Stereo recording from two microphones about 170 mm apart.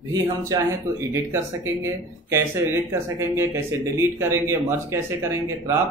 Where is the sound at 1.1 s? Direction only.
15° right (ahead or behind).